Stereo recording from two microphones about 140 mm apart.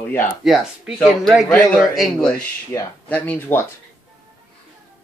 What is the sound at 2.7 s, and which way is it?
Speech, 25° left (ahead or behind).